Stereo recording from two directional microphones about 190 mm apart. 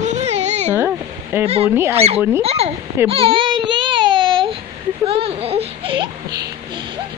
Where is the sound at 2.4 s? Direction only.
30° right (ahead or behind).